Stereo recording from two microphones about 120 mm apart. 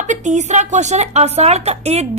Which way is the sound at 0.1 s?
80° right.